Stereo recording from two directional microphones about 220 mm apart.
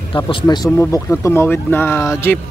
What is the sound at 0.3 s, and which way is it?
Speech, 20° left (ahead or behind).